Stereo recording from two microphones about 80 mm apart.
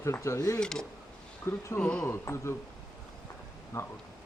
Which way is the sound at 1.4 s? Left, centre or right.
Left.